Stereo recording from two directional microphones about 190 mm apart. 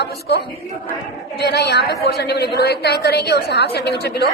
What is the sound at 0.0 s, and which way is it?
A woman's voice, 60° left (ahead or behind).